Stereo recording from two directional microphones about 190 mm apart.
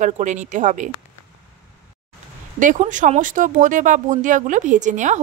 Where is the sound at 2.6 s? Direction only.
40° right (ahead or behind).